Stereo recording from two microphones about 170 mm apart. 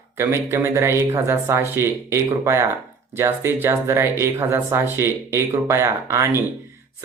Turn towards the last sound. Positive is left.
turn(degrees=-15)  # may be behind; listen again after turning